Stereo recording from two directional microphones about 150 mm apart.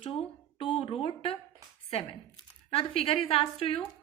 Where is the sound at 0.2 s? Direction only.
35° left (ahead or behind).